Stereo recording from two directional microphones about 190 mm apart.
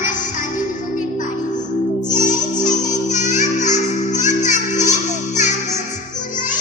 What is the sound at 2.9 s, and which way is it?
Music, 40° left (ahead or behind).